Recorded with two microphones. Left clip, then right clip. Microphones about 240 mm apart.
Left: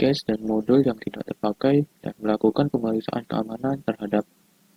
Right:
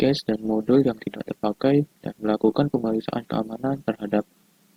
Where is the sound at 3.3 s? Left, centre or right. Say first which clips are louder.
Even; right.